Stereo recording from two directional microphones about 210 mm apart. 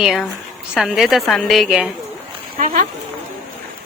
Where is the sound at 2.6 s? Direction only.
40° right (ahead or behind).